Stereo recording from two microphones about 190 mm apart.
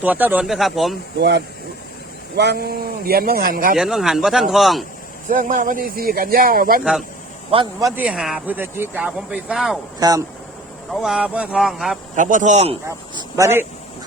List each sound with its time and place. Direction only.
0.0 s speech: 10° right (ahead or behind)
1.2 s speech: 60° right (ahead or behind)
3.8 s speech: 5° right (ahead or behind)
5.3 s speech: 45° right (ahead or behind)
7.5 s speech: 20° right (ahead or behind)
8.0 s speech: 5° right (ahead or behind)
10.0 s speech: 20° right (ahead or behind)
10.9 s speech: centre (ahead or behind)
12.1 s speech: 40° right (ahead or behind)
13.1 s speech: 15° right (ahead or behind)